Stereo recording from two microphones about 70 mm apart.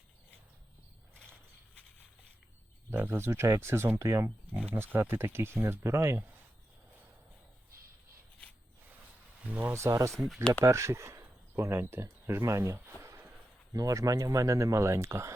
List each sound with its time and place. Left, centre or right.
2.9 s speech: right
4.5 s speech: right
4.8 s speech: right
9.5 s speech: right
9.7 s speech: right
13.7 s speech: right